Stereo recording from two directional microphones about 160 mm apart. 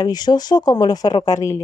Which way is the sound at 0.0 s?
25° left (ahead or behind).